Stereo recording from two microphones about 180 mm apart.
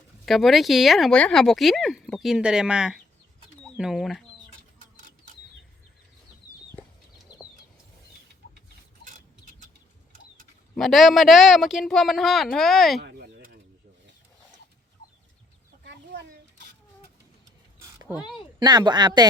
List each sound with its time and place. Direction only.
0.3 s speech: centre (ahead or behind)
7.3 s bird: 20° left (ahead or behind)
10.8 s speech: centre (ahead or behind)
13.1 s a sound: 60° right (ahead or behind)
18.6 s speech: 20° right (ahead or behind)